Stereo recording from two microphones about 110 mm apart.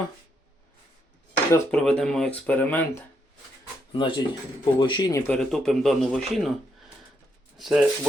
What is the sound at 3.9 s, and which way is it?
A man's voice, 50° left (ahead or behind).